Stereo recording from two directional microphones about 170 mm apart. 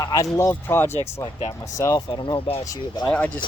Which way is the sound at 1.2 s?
25° left (ahead or behind).